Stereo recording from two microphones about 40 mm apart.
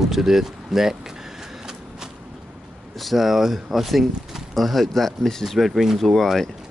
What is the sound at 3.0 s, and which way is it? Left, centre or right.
Speech, centre.